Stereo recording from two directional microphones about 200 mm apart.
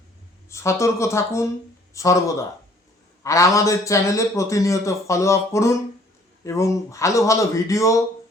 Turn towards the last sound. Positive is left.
turn(degrees=15)  # may be behind; listen again after turning